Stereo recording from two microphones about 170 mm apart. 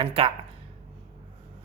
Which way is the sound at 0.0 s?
35° right (ahead or behind).